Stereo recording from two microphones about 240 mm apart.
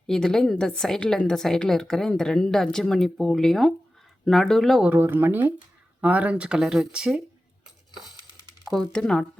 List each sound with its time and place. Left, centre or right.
0.1 s a woman's voice: centre
8.6 s a woman's voice: centre